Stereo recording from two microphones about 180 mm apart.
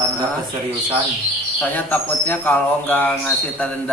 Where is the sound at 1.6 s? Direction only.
10° left (ahead or behind).